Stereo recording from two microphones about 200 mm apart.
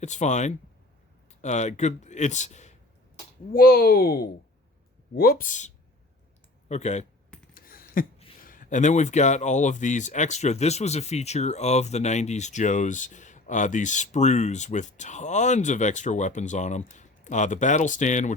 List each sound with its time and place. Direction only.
0.0 s speech: 35° left (ahead or behind)
3.5 s speech: 50° left (ahead or behind)
7.5 s a sound: 45° left (ahead or behind)
8.4 s speech: 40° left (ahead or behind)